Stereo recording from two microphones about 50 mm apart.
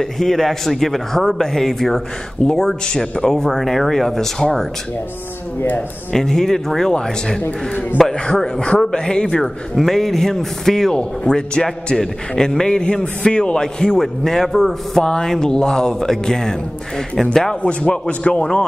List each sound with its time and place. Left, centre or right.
0.0 s a man's voice: centre
2.4 s a man's voice: centre
6.1 s a man's voice: centre
8.4 s a man's voice: centre
17.6 s a man's voice: left